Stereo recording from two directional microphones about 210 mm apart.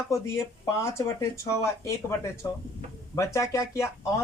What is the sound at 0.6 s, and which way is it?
Speech, 15° left (ahead or behind).